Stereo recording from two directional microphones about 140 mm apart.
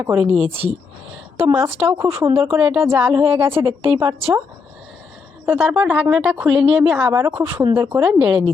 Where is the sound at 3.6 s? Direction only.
40° right (ahead or behind).